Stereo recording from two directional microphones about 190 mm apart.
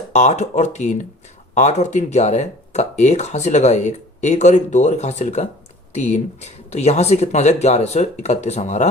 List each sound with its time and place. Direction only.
0.1 s speech: 35° left (ahead or behind)